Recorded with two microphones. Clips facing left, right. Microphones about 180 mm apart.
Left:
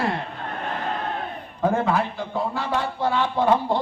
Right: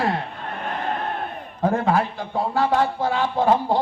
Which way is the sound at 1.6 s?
40° right (ahead or behind).